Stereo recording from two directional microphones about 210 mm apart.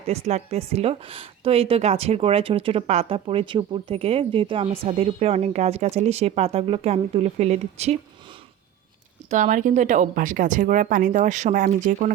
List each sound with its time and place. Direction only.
0.1 s a woman's voice: 30° right (ahead or behind)
9.3 s a woman's voice: 35° right (ahead or behind)